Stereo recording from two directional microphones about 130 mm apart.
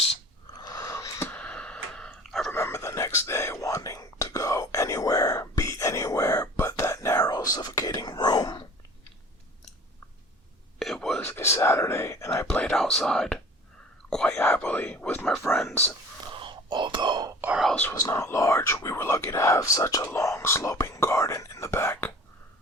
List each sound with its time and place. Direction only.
0.6 s a sound: 25° left (ahead or behind)
1.3 s a sound: 10° left (ahead or behind)
2.5 s a sound: 20° left (ahead or behind)
3.2 s whispering: 20° left (ahead or behind)
10.8 s whispering: 5° left (ahead or behind)
11.3 s whispering: 20° left (ahead or behind)
12.5 s whispering: 5° left (ahead or behind)
16.3 s whispering: 40° right (ahead or behind)
17.9 s whispering: 25° left (ahead or behind)